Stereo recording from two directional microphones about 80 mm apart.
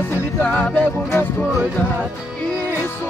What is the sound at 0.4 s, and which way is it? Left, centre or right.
Music, centre.